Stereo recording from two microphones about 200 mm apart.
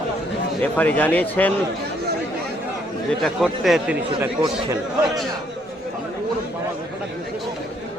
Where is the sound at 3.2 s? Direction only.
Centre (ahead or behind).